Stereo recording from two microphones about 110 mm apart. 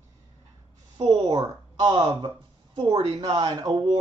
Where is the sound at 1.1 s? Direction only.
40° right (ahead or behind).